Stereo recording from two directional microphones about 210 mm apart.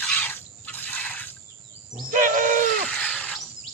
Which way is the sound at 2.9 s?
5° left (ahead or behind).